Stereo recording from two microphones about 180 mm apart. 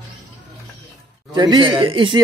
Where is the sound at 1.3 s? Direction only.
25° right (ahead or behind).